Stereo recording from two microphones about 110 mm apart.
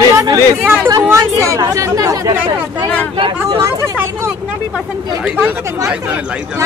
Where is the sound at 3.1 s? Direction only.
50° right (ahead or behind).